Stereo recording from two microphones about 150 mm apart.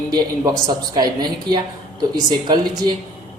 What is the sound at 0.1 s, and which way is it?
Speech, 25° right (ahead or behind).